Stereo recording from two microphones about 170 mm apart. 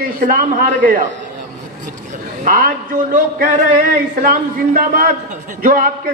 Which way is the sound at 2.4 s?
55° right (ahead or behind).